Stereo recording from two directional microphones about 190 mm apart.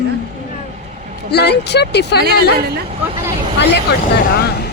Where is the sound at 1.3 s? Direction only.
60° left (ahead or behind).